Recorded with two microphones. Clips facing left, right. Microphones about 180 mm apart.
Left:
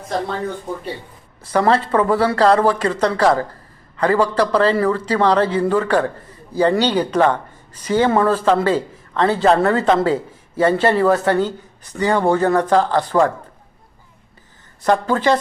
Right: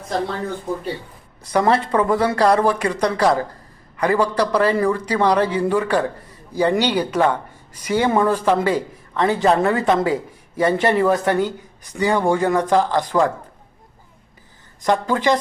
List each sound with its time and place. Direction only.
1.5 s speech: 15° right (ahead or behind)
14.8 s speech: 15° right (ahead or behind)